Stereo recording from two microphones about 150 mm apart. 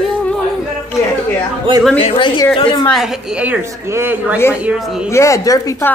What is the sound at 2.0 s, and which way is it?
Speech, 35° left (ahead or behind).